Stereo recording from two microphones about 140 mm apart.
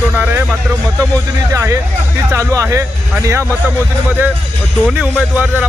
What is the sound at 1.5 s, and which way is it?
Speech, 20° right (ahead or behind).